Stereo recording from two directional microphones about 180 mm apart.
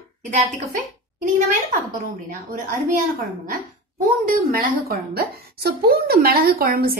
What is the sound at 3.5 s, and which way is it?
A woman's voice, 50° right (ahead or behind).